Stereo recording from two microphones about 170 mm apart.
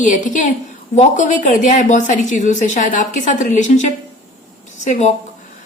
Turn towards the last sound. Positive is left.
turn(degrees=45)  # may be behind; listen again after turning